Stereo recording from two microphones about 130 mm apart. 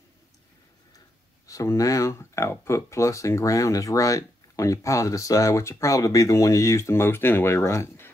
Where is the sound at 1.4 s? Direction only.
25° left (ahead or behind).